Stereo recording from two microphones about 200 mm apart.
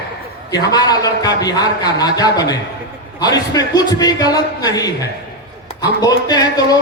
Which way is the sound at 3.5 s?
20° left (ahead or behind).